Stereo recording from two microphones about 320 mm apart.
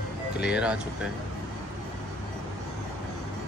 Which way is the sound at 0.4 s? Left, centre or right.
Centre.